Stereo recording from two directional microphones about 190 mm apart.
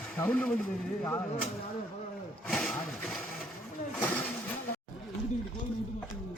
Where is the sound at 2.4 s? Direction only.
5° left (ahead or behind).